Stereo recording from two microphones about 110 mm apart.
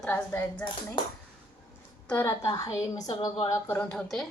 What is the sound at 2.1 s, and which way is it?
Speech, 20° left (ahead or behind).